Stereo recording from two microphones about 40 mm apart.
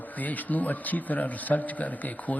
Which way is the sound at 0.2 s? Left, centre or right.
Left.